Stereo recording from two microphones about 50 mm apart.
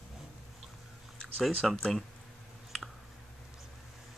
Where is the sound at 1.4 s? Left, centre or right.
Centre.